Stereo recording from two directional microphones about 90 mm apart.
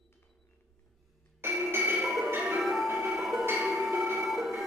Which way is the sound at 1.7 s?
20° right (ahead or behind).